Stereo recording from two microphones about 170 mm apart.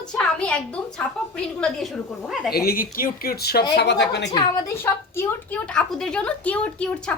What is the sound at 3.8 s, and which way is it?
Speech, 90° left.